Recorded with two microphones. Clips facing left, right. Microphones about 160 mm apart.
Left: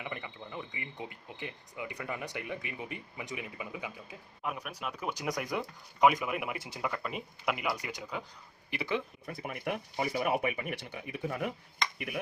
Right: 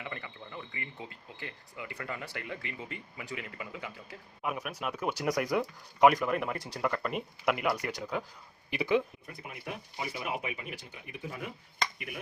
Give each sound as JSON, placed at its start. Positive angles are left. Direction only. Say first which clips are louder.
{"t": 0.0, "sound": "speech", "louder": "left 1 dB", "side_deg": 20}
{"t": 4.4, "sound": "speech", "louder": "right 3 dB", "side_deg": -5}
{"t": 8.7, "sound": "speech", "louder": "right 6 dB", "side_deg": -15}
{"t": 9.2, "sound": "speech", "louder": "left 6 dB", "side_deg": 65}